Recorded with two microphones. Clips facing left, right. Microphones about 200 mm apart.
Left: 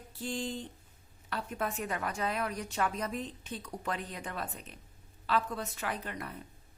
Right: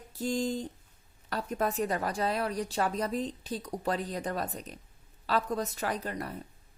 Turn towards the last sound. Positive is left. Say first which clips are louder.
# right 4 dB
turn(degrees=-40)  # may be behind; listen again after turning